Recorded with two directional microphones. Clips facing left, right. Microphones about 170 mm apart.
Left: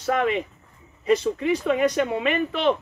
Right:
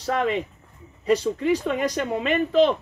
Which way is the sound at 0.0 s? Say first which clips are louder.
Left 1 dB; 35° right (ahead or behind).